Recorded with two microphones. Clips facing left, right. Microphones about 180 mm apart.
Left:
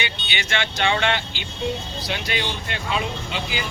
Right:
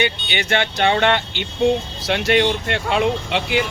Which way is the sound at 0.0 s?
50° right (ahead or behind).